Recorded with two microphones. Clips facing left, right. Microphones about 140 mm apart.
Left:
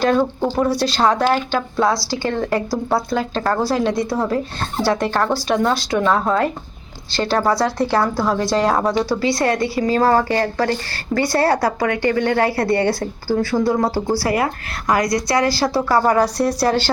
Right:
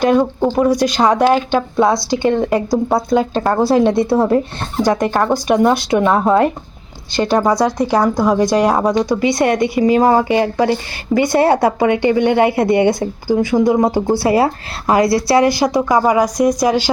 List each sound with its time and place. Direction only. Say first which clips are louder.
0.0 s a woman's voice: right 4 dB; 15° right (ahead or behind)
4.8 s a woman's voice: right 4 dB; 15° right (ahead or behind)